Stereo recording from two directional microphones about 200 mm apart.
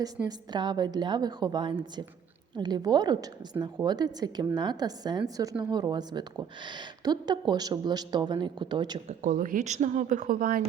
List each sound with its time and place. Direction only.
0.3 s a woman's voice: 20° right (ahead or behind)
9.0 s speech: 40° right (ahead or behind)